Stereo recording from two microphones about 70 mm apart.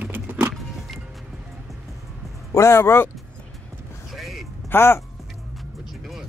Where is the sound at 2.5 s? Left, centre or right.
Left.